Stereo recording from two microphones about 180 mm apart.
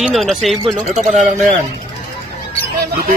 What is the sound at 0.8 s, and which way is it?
Speech, 40° right (ahead or behind).